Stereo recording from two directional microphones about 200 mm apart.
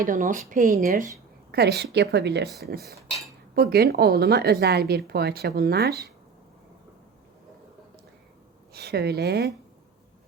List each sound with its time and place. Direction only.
0.0 s speech: 40° right (ahead or behind)
1.5 s a woman's voice: 55° right (ahead or behind)
3.5 s speech: 50° right (ahead or behind)
8.7 s speech: 55° right (ahead or behind)